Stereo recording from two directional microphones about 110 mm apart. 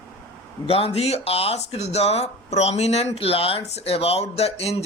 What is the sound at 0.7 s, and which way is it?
Speech, 65° left (ahead or behind).